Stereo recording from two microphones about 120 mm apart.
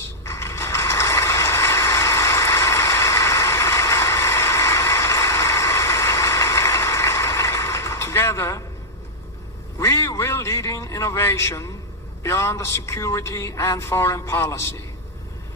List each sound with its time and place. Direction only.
0.3 s mechanisms: 25° left (ahead or behind)
9.8 s a sound: 25° left (ahead or behind)
12.2 s a man's voice: 25° left (ahead or behind)